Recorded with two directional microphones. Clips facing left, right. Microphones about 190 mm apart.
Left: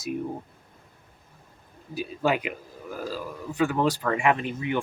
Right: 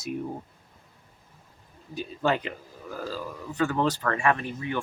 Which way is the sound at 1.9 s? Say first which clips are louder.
Left 1 dB; 10° left (ahead or behind).